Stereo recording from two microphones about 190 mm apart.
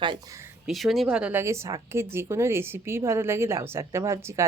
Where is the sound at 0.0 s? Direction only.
25° right (ahead or behind).